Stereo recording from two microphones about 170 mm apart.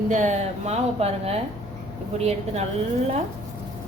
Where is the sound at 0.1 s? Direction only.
45° right (ahead or behind).